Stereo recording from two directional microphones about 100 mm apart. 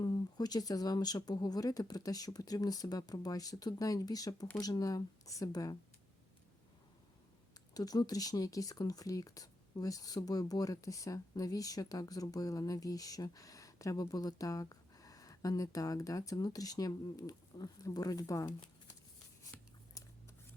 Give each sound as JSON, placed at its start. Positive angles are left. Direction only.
{"t": 0.0, "sound": "speech", "side_deg": 45}
{"t": 7.7, "sound": "speech", "side_deg": 40}